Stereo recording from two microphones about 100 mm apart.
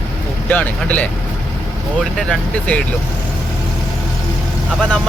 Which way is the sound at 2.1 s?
10° left (ahead or behind).